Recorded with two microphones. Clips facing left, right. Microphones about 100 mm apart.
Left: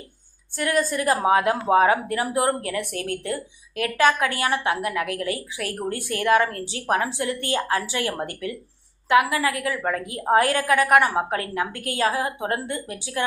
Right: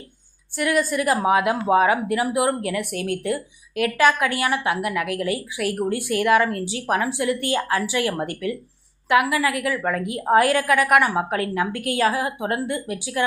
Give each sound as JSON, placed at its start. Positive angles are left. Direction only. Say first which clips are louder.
{"t": 0.5, "sound": "a woman's voice", "louder": "right 2 dB", "side_deg": 35}